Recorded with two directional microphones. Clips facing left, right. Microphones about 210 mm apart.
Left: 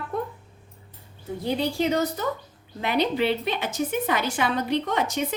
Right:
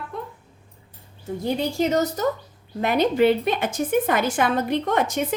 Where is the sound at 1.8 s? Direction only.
40° right (ahead or behind).